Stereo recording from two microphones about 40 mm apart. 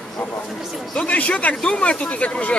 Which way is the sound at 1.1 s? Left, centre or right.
Left.